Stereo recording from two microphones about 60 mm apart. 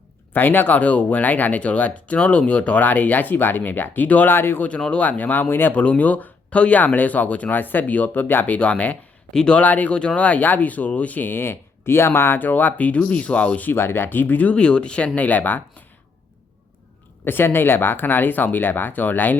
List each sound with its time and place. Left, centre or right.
0.3 s speech: left
4.8 s speech: centre
5.7 s speech: left
8.5 s speech: left
13.7 s speech: left
17.2 s speech: left